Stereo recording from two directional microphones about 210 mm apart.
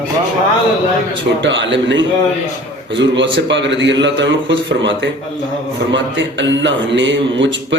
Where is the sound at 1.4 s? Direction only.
60° right (ahead or behind).